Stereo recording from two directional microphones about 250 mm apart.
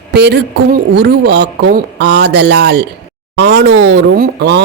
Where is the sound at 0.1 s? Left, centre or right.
Right.